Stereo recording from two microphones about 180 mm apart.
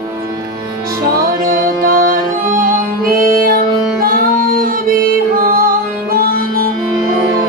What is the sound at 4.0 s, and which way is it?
Music, 50° right (ahead or behind).